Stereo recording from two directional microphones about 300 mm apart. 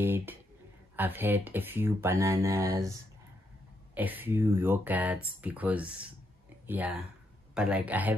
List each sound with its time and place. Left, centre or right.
0.0 s speech: centre